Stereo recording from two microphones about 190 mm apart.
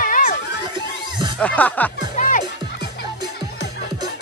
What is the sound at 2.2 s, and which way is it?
Music, 45° left (ahead or behind).